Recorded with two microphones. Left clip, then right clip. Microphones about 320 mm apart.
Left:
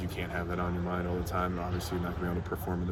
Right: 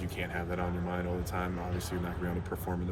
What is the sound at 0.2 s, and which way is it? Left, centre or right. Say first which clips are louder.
Speech: left 1 dB; centre.